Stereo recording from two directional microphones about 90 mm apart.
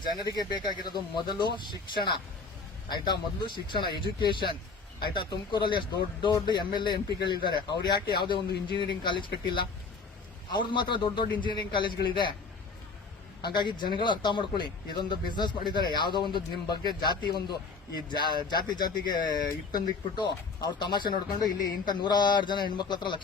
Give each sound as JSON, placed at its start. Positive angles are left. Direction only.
{"t": 0.3, "sound": "speech", "side_deg": 55}
{"t": 13.4, "sound": "speech", "side_deg": 55}